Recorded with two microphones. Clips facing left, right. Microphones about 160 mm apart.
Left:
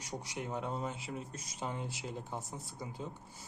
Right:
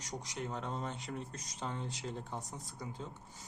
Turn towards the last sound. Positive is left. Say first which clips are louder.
# left 1 dB
turn(degrees=5)  # may be behind; listen again after turning